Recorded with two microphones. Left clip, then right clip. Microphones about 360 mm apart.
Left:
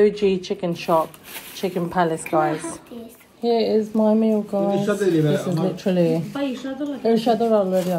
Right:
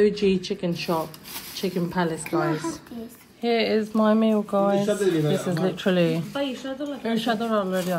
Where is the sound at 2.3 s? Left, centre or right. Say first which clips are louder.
Left 6 dB; left.